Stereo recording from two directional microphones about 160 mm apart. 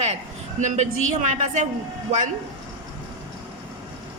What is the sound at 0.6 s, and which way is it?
A woman's voice, 50° right (ahead or behind).